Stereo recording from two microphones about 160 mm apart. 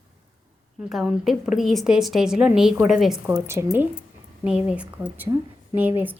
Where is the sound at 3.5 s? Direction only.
15° right (ahead or behind).